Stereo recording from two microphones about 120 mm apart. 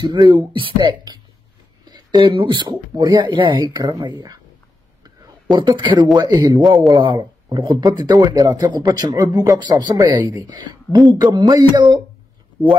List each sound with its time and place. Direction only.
0.0 s speech: 40° right (ahead or behind)
5.0 s a sound: 40° right (ahead or behind)
6.1 s speech: 35° right (ahead or behind)